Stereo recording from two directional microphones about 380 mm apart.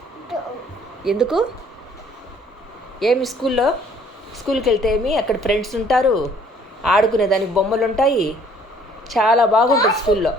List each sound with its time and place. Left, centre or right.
1.0 s speech: centre
3.0 s speech: centre